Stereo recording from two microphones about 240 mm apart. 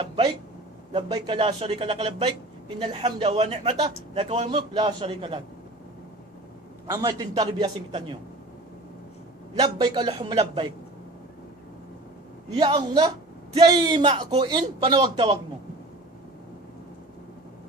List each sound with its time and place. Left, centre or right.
0.9 s a man's voice: right
6.8 s a man's voice: centre
9.6 s a man's voice: centre
12.5 s a man's voice: centre